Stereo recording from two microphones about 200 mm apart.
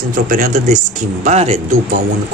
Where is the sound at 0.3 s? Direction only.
45° right (ahead or behind).